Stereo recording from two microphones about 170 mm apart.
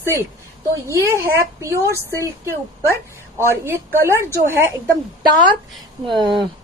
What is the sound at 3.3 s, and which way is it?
A woman's voice, 15° right (ahead or behind).